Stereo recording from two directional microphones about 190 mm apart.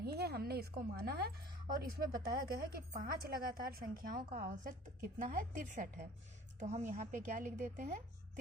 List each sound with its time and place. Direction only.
0.0 s a woman's voice: 55° right (ahead or behind); by 7.9 s 40° right (ahead or behind)